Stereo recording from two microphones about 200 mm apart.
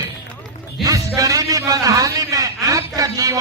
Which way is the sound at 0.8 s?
15° right (ahead or behind).